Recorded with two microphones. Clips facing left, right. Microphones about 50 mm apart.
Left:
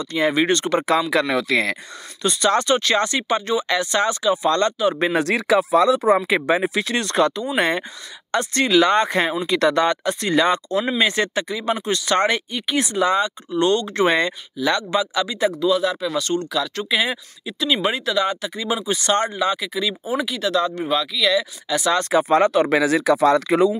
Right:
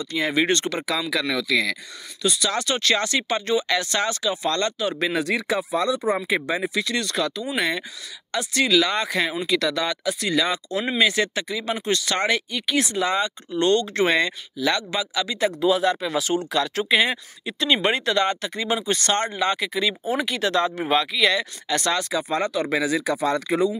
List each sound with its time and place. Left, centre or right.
0.4 s speech: centre
1.2 s speech: left
2.6 s speech: left
5.2 s speech: left
6.6 s speech: left
7.5 s speech: left; by 15.5 s centre
15.6 s speech: centre
19.4 s speech: centre
21.4 s speech: centre
22.1 s speech: left